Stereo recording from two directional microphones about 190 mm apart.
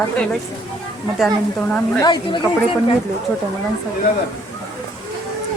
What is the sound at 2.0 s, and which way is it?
Speech, 20° left (ahead or behind).